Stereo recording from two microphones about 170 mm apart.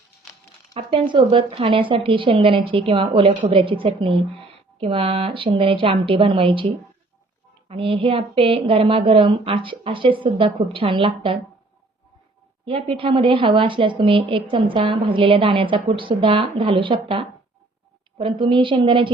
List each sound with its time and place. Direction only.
0.7 s a woman's voice: 30° right (ahead or behind)
7.7 s a woman's voice: 30° right (ahead or behind)
12.6 s a woman's voice: 35° right (ahead or behind)